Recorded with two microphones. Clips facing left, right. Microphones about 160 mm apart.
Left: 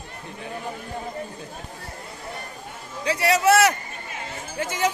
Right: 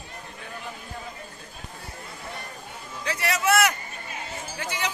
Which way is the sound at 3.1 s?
35° left (ahead or behind).